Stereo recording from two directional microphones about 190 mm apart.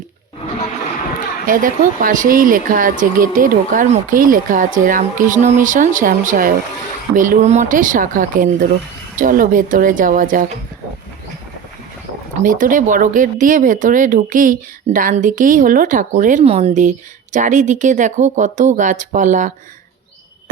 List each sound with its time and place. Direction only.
1.5 s speech: 45° right (ahead or behind)
12.4 s speech: 45° right (ahead or behind)